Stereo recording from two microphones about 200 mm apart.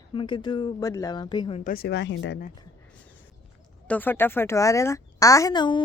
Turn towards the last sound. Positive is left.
turn(degrees=25)  # may be behind; listen again after turning